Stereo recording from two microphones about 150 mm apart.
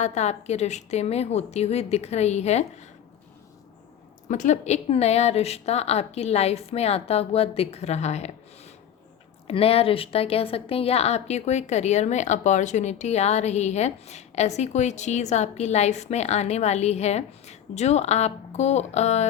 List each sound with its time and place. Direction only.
0.0 s a woman's voice: 50° left (ahead or behind)
4.3 s a woman's voice: 55° left (ahead or behind)